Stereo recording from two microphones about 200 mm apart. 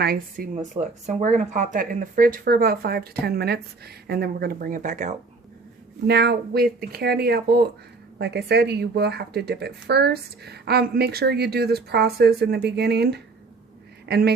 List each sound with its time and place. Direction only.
0.0 s speech: 45° right (ahead or behind)
6.1 s speech: 55° right (ahead or behind)